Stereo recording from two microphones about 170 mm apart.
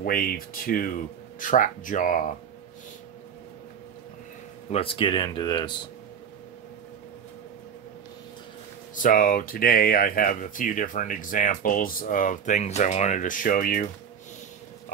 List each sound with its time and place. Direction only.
0.0 s speech: 55° left (ahead or behind)
4.6 s speech: 35° left (ahead or behind)
8.9 s speech: 55° left (ahead or behind)